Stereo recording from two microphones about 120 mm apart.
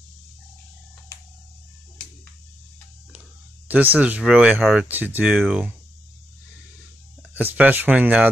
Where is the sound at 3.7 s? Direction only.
15° right (ahead or behind).